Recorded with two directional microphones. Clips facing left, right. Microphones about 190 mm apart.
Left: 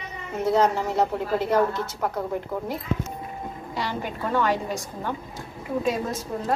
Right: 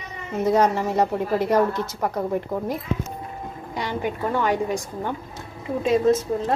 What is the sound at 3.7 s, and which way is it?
A woman's voice, 15° right (ahead or behind).